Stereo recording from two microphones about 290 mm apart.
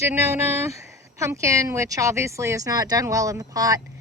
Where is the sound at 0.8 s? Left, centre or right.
Centre.